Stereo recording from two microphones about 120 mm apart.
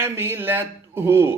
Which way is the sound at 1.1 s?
20° right (ahead or behind).